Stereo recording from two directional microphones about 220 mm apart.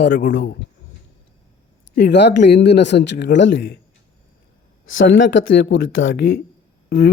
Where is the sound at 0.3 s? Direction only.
50° left (ahead or behind).